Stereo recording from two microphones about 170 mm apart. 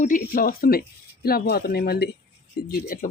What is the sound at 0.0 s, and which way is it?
Speech, 55° left (ahead or behind).